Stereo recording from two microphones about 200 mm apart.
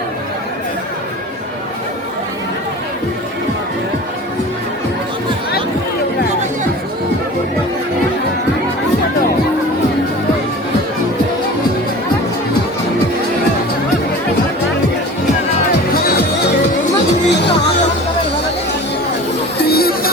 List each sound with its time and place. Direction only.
17.2 s music: 60° left (ahead or behind)
19.6 s music: 50° left (ahead or behind)